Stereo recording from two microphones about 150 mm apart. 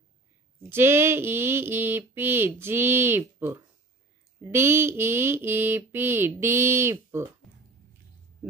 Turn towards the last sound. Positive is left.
turn(degrees=-15)  # may be behind; listen again after turning